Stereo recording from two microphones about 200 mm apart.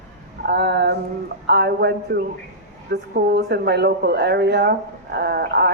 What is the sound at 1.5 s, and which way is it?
A woman's voice, 55° right (ahead or behind).